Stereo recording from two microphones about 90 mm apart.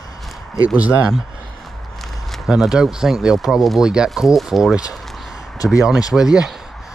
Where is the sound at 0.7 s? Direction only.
15° right (ahead or behind).